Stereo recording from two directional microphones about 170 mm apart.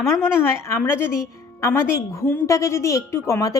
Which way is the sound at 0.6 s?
15° left (ahead or behind).